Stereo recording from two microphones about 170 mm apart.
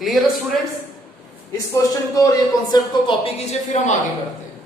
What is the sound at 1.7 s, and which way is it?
Speech, 20° left (ahead or behind).